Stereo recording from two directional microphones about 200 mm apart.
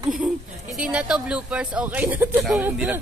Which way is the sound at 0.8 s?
5° right (ahead or behind).